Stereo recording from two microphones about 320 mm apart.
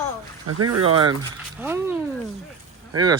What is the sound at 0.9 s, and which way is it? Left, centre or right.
Speech, centre.